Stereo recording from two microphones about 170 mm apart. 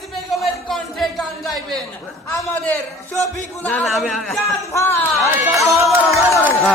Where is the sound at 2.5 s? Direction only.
15° left (ahead or behind).